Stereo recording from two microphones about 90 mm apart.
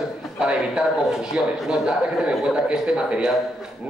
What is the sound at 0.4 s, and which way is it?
A man's voice, 10° right (ahead or behind).